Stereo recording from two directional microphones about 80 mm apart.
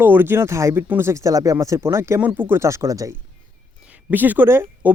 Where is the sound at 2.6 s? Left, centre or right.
Right.